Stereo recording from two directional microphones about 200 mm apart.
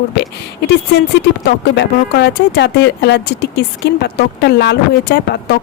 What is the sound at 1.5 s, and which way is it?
Speech, 60° left (ahead or behind).